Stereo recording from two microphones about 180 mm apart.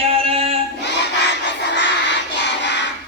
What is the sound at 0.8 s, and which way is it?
Crowd, 75° left (ahead or behind).